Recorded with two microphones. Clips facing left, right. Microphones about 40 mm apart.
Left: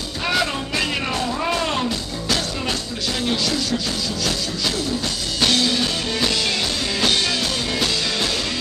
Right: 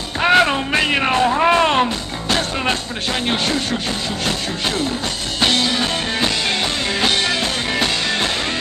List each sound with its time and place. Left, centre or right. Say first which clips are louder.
0.2 s music: right 8 dB; right